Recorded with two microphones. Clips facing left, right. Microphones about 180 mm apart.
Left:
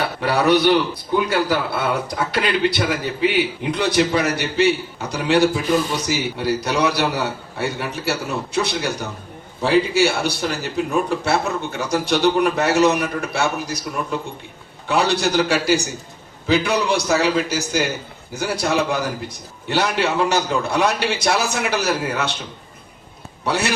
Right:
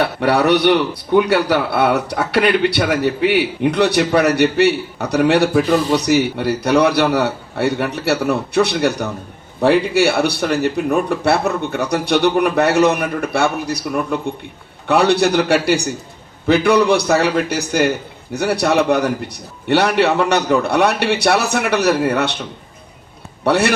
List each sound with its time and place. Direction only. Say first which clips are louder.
0.0 s a man's voice: right 4 dB; 70° right (ahead or behind)
23.4 s a man's voice: right 7 dB; 60° right (ahead or behind)